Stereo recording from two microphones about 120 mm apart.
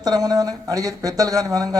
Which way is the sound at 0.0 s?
35° right (ahead or behind).